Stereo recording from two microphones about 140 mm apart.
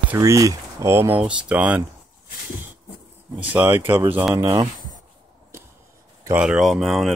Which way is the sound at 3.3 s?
10° right (ahead or behind).